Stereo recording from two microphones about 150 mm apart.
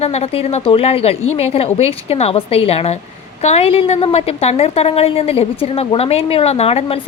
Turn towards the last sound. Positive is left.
turn(degrees=45)  # may be behind; listen again after turning